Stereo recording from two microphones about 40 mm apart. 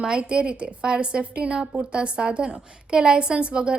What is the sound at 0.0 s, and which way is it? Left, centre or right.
A woman's voice, right.